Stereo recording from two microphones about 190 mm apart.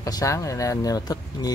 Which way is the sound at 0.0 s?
15° left (ahead or behind).